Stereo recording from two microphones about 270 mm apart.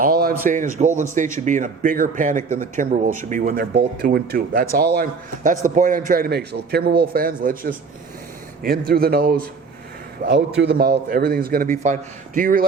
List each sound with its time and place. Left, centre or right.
0.0 s a man's voice: right
8.9 s speech: right